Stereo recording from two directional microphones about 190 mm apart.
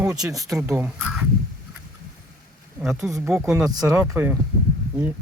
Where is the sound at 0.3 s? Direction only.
15° right (ahead or behind).